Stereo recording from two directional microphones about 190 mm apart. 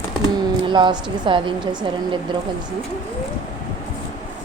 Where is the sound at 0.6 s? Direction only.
25° right (ahead or behind).